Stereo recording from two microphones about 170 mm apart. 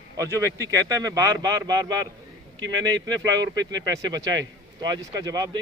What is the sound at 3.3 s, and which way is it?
Speech, 20° right (ahead or behind).